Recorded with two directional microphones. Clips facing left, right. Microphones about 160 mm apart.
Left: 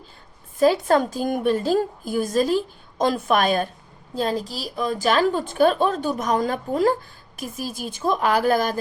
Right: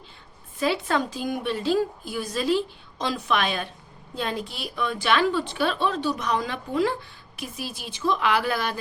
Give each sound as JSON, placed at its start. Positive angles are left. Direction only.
{"t": 0.6, "sound": "a woman's voice", "side_deg": 45}